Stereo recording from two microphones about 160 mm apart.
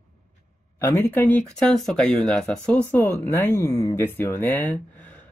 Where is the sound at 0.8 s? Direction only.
10° left (ahead or behind).